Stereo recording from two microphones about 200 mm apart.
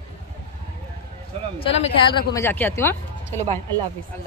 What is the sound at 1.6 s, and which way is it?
Speech, 30° left (ahead or behind).